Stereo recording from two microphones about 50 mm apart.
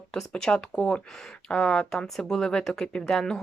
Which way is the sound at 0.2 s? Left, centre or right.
Centre.